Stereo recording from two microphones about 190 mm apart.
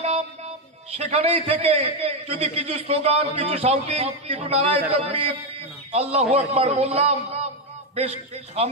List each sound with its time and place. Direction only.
0.9 s a man's voice: 30° right (ahead or behind)